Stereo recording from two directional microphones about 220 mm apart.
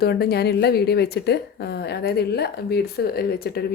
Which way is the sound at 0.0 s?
45° left (ahead or behind).